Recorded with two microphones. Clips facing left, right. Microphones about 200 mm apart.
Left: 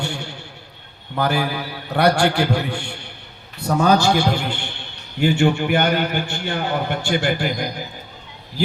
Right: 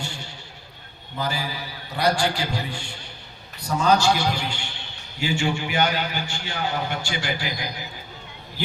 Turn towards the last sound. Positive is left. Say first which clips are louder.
# left 7 dB
turn(degrees=50)  # may be behind; listen again after turning